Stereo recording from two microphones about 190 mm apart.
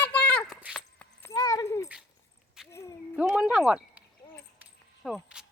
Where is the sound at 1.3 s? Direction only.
20° left (ahead or behind).